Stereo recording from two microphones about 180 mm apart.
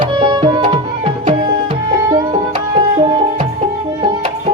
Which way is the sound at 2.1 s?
25° right (ahead or behind).